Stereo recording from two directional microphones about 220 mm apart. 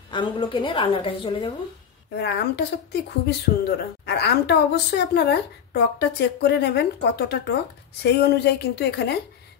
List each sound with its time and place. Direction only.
0.1 s a woman's voice: 20° left (ahead or behind)
2.1 s speech: 50° left (ahead or behind)